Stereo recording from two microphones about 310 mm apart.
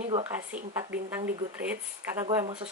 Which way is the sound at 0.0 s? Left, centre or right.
Right.